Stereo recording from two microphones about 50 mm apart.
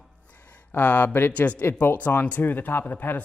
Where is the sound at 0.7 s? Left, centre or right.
Left.